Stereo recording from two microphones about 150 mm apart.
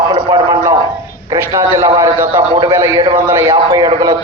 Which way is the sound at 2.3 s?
30° right (ahead or behind).